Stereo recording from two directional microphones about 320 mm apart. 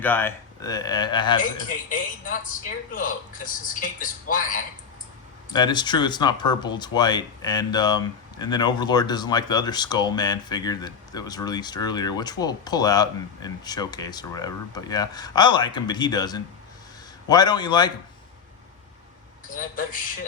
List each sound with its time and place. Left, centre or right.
0.0 s speech: centre
1.9 s a man's voice: left
5.5 s speech: centre